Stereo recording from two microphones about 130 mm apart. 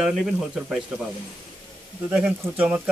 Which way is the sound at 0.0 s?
5° right (ahead or behind).